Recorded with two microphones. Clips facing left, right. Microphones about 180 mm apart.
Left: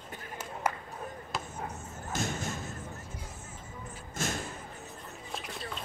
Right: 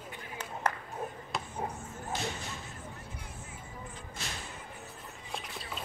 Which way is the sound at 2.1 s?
45° left (ahead or behind).